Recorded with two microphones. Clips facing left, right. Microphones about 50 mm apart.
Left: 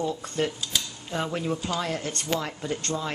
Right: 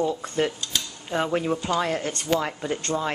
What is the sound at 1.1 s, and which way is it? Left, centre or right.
Speech, centre.